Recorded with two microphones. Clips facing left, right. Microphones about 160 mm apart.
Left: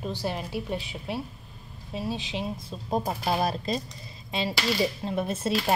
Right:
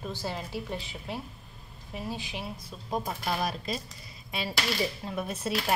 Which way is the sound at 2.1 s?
20° left (ahead or behind).